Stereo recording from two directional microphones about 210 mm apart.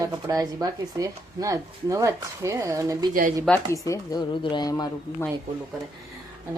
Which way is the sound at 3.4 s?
10° left (ahead or behind).